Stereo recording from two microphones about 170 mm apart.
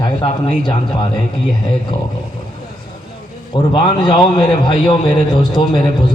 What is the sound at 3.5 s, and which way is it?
A man's voice, 30° left (ahead or behind).